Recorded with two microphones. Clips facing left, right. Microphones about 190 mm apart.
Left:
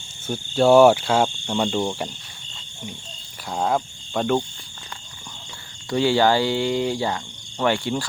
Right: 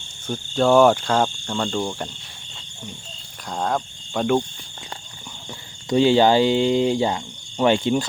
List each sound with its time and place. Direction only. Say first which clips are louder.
0.3 s speech: left 2 dB; 5° left (ahead or behind)
3.5 s speech: left 2 dB; 5° left (ahead or behind)
5.9 s speech: right 3 dB; 20° right (ahead or behind)